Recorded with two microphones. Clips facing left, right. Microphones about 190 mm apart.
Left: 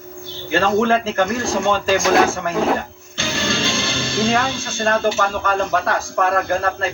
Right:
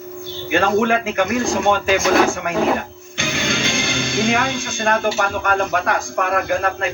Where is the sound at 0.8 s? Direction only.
15° right (ahead or behind).